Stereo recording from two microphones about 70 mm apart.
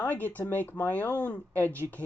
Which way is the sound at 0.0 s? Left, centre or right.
Left.